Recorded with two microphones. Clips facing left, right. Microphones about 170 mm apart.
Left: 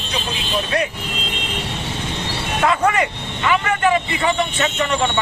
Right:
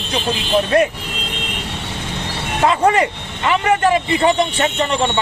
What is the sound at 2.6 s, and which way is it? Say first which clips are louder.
Speech: right 3 dB; 30° right (ahead or behind).